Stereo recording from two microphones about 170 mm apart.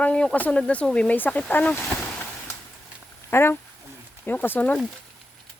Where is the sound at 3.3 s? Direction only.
15° left (ahead or behind).